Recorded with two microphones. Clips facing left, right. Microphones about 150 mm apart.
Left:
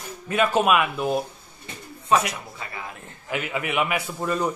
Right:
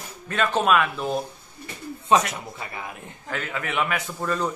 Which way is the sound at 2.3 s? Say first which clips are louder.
Right 1 dB; 25° right (ahead or behind).